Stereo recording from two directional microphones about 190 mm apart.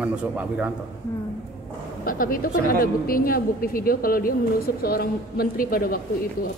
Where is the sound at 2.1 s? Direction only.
50° left (ahead or behind).